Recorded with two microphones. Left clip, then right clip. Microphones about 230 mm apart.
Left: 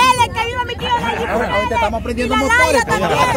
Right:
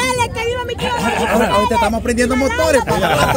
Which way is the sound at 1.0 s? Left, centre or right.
Right.